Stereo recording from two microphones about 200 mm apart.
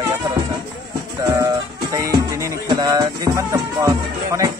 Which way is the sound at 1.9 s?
15° right (ahead or behind).